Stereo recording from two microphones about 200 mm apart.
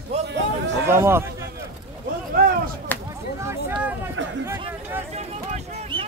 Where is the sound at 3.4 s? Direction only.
10° right (ahead or behind).